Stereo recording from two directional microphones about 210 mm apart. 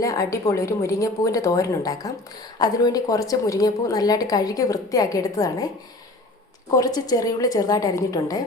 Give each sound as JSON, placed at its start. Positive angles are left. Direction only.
{"t": 0.0, "sound": "a woman's voice", "side_deg": 15}
{"t": 6.7, "sound": "a woman's voice", "side_deg": 15}